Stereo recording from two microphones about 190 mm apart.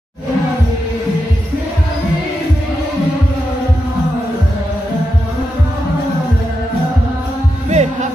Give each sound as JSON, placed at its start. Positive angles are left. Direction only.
{"t": 7.7, "sound": "heart sounds", "side_deg": -35}